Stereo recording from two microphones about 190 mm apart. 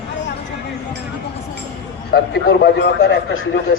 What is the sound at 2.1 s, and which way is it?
A man's voice, 60° left (ahead or behind).